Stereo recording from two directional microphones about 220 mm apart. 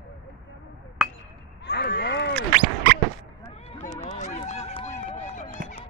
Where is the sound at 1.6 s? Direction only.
45° left (ahead or behind).